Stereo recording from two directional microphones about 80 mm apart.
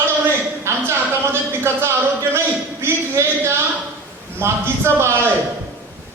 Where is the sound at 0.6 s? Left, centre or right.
Right.